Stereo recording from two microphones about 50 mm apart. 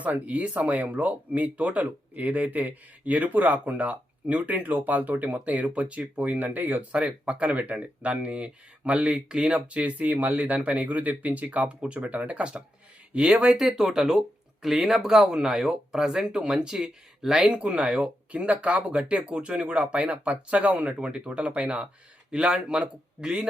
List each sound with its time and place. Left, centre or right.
0.0 s speech: right
6.9 s speech: right
13.6 s speech: centre
17.5 s speech: right